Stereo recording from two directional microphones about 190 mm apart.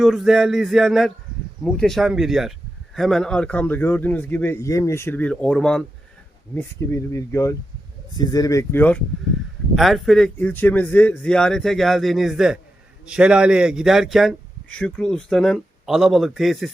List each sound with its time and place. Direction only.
0.0 s a man's voice: centre (ahead or behind)